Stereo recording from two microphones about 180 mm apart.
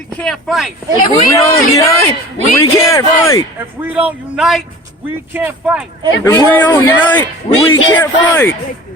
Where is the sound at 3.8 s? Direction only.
10° right (ahead or behind).